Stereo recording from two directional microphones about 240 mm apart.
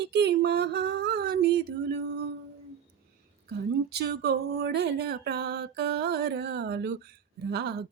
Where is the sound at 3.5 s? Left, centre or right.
Right.